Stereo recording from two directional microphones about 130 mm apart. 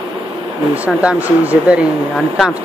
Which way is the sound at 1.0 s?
10° right (ahead or behind).